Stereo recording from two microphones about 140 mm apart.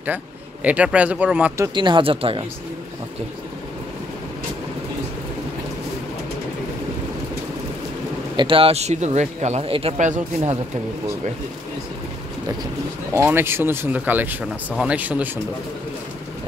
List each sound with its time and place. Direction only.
0.0 s speech: 10° right (ahead or behind)
1.8 s speech: 35° right (ahead or behind)
8.4 s speech: 40° right (ahead or behind); by 9.7 s 55° right (ahead or behind)
9.7 s speech: 40° right (ahead or behind)
9.9 s speech: 60° right (ahead or behind)
13.1 s speech: 15° right (ahead or behind)